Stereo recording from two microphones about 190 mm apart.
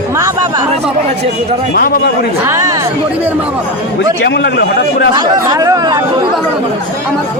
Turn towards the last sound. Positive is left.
turn(degrees=-20)  # may be behind; listen again after turning